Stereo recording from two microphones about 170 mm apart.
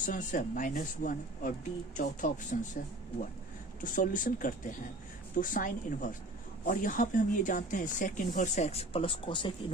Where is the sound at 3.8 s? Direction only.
50° left (ahead or behind).